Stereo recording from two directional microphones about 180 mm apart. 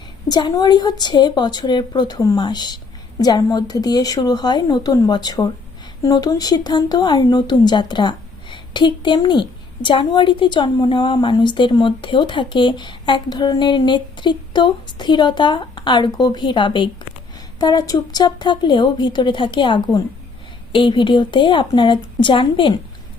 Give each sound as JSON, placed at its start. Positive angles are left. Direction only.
{"t": 0.3, "sound": "speech", "side_deg": 20}